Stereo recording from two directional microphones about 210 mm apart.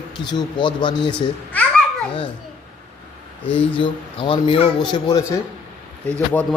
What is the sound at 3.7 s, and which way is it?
Speech, 25° left (ahead or behind).